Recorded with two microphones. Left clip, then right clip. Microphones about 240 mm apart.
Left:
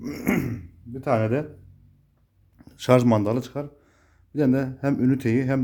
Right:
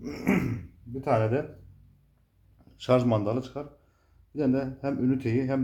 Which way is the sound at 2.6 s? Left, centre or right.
Left.